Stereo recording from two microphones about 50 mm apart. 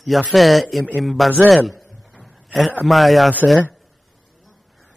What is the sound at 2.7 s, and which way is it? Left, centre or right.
Speech, centre.